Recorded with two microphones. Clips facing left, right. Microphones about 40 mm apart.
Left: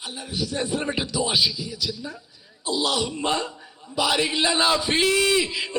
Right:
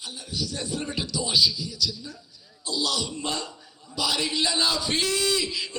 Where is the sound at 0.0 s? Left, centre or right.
Left.